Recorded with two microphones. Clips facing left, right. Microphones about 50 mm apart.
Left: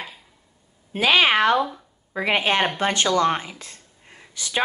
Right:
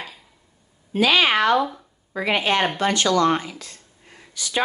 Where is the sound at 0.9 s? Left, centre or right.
Left.